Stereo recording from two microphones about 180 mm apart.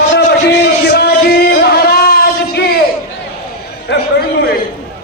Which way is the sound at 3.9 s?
90° left.